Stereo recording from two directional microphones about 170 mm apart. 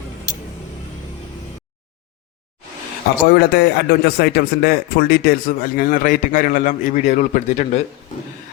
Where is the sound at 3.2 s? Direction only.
70° left (ahead or behind); by 7.8 s 45° left (ahead or behind).